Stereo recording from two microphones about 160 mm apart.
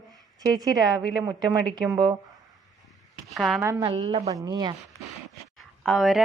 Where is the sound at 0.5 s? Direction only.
25° right (ahead or behind).